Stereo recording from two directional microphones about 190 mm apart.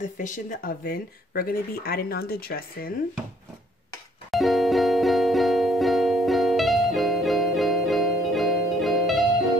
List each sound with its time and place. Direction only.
0.0 s speech: 40° left (ahead or behind)
4.3 s music: centre (ahead or behind)